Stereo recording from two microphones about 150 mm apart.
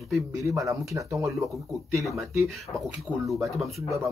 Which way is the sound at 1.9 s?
Centre (ahead or behind).